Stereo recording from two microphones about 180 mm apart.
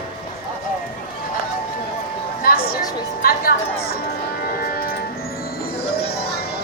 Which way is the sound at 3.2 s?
55° left (ahead or behind).